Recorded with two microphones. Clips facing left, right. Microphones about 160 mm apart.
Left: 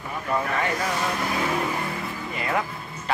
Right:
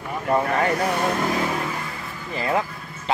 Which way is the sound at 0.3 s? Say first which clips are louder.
Right 5 dB; 35° right (ahead or behind).